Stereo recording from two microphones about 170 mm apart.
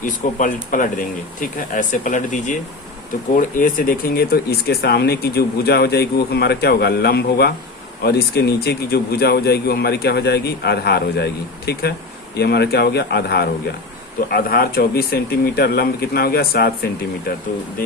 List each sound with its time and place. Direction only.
0.0 s speech: 50° left (ahead or behind); by 16.7 s 65° left (ahead or behind)